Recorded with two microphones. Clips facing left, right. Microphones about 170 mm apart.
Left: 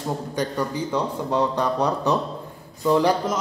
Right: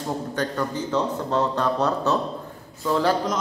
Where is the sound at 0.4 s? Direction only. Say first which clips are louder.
Left 2 dB; 10° left (ahead or behind).